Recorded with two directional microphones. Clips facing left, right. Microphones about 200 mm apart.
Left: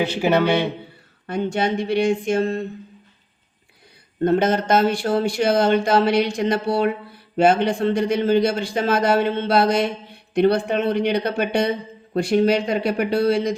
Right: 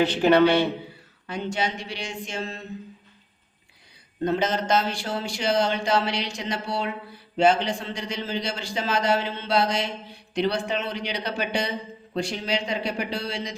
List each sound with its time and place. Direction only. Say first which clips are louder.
0.0 s a man's voice: right 1 dB; 10° left (ahead or behind)
1.3 s a man's voice: left 6 dB; 55° left (ahead or behind)
4.2 s a man's voice: left 6 dB; 55° left (ahead or behind)